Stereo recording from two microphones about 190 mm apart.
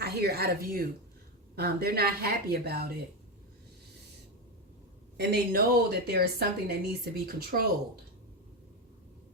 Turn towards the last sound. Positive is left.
turn(degrees=-50)  # may be behind; listen again after turning